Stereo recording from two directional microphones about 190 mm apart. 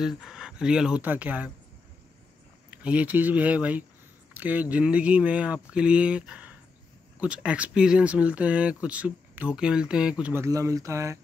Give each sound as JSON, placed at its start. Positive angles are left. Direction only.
{"t": 0.0, "sound": "speech", "side_deg": 0}
{"t": 2.7, "sound": "speech", "side_deg": -5}